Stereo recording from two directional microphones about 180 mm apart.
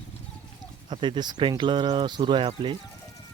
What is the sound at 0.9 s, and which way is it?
Speech, 25° right (ahead or behind).